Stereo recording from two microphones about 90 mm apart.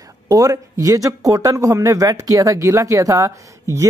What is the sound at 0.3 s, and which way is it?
Speech, 40° right (ahead or behind).